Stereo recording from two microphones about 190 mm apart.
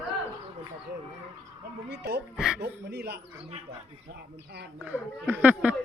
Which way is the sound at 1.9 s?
60° right (ahead or behind).